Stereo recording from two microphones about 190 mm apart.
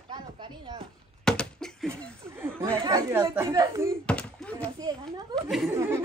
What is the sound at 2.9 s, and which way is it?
Speech, 15° right (ahead or behind).